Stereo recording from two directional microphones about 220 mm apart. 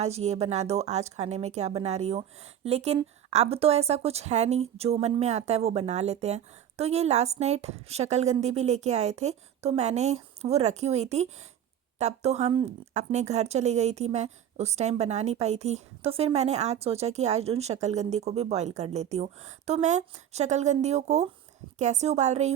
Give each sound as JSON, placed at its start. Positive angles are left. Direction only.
{"t": 0.0, "sound": "a woman's voice", "side_deg": -30}